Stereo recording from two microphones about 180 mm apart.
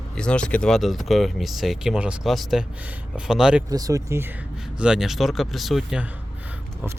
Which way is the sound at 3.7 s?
20° right (ahead or behind).